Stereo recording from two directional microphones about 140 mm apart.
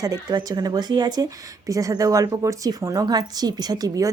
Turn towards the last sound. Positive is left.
turn(degrees=-25)  # may be behind; listen again after turning